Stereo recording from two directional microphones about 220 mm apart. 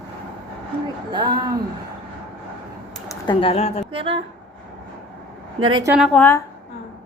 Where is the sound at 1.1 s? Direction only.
20° right (ahead or behind).